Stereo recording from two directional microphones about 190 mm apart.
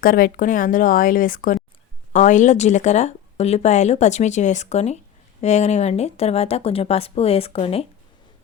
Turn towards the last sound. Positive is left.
turn(degrees=30)  # may be behind; listen again after turning